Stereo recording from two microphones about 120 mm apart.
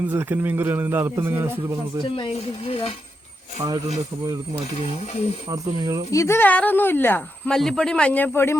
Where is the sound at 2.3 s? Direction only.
50° left (ahead or behind).